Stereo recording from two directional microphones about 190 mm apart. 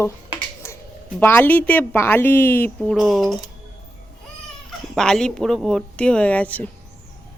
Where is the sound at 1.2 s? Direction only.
10° left (ahead or behind).